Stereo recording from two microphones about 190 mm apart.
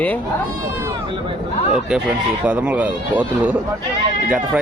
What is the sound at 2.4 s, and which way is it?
Speech, 5° right (ahead or behind).